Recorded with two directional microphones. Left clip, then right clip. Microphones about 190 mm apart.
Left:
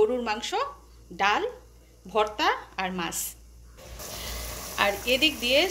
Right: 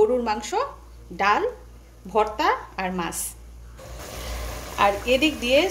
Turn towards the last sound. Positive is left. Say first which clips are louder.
# right 3 dB
turn(degrees=0)  # may be behind; listen again after turning